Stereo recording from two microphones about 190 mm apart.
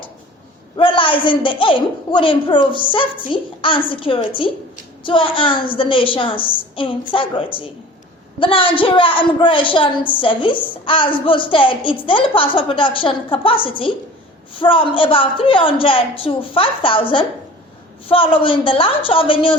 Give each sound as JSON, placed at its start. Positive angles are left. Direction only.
{"t": 0.8, "sound": "a woman's voice", "side_deg": 25}